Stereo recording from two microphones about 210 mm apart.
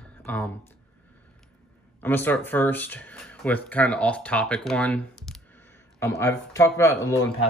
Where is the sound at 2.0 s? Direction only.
10° left (ahead or behind).